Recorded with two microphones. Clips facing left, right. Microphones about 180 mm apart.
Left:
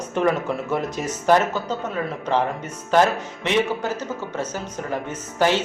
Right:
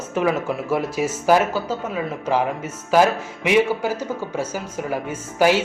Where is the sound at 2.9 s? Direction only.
10° right (ahead or behind).